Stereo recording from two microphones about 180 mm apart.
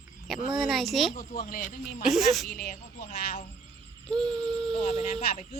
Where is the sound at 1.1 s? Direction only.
55° left (ahead or behind).